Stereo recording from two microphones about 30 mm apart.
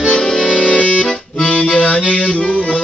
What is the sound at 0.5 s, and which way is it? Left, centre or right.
Music, left.